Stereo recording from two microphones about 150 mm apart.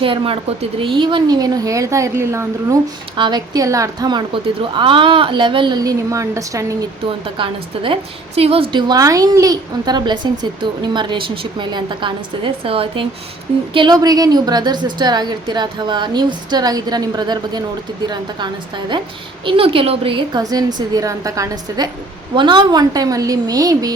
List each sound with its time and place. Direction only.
0.0 s a woman's voice: 35° right (ahead or behind); by 2.7 s 20° right (ahead or behind)
3.2 s a woman's voice: 30° right (ahead or behind)
4.8 s a woman's voice: 35° right (ahead or behind)
7.0 s a woman's voice: 35° right (ahead or behind)
8.7 s a woman's voice: 25° right (ahead or behind)
13.7 s a woman's voice: 25° right (ahead or behind)
19.5 s a woman's voice: 40° right (ahead or behind)
20.4 s a woman's voice: 25° right (ahead or behind)